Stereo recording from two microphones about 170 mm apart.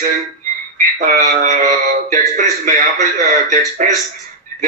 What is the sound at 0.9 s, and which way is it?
A man's voice, 50° right (ahead or behind).